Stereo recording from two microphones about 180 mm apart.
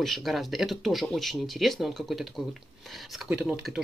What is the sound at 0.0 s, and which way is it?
Speech, centre (ahead or behind).